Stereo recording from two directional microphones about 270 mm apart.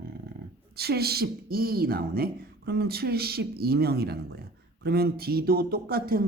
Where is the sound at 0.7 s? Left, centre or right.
Right.